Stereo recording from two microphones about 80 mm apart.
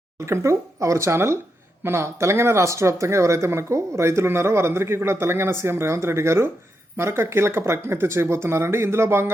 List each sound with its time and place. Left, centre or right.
0.3 s speech: right